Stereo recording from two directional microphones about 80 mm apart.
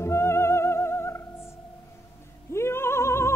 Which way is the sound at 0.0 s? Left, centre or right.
Left.